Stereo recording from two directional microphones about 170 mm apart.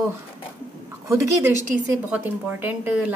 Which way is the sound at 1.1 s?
15° right (ahead or behind).